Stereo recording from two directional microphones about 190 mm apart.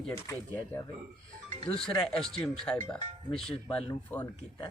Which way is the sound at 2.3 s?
5° left (ahead or behind).